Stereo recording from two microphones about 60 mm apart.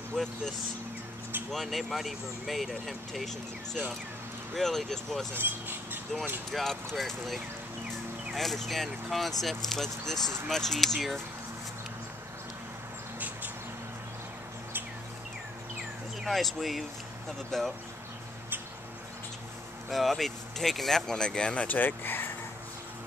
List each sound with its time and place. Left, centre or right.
0.1 s speech: centre
5.3 s speech: right
6.5 s speech: centre
16.3 s speech: centre
19.9 s speech: centre
21.6 s speech: left